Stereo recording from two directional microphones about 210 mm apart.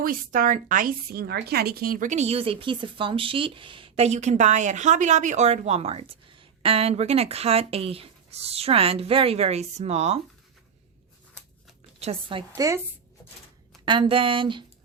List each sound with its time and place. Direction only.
0.0 s a woman's voice: 40° right (ahead or behind)
11.9 s a woman's voice: 30° right (ahead or behind)
13.8 s a woman's voice: 25° right (ahead or behind)